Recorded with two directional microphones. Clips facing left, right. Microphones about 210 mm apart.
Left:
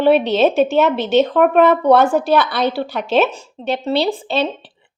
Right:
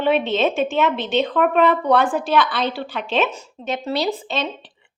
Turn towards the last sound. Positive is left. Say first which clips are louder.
# left 5 dB
turn(degrees=30)  # may be behind; listen again after turning